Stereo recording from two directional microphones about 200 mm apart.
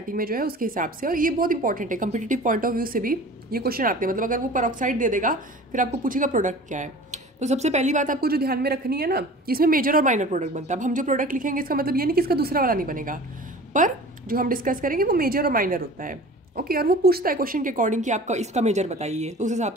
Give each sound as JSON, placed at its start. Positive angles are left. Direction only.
{"t": 0.1, "sound": "a woman's voice", "side_deg": -45}